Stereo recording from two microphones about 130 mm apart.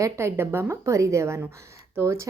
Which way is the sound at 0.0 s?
20° right (ahead or behind).